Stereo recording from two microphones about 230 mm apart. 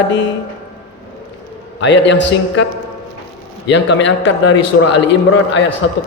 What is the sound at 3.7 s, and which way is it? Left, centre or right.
Speech, left.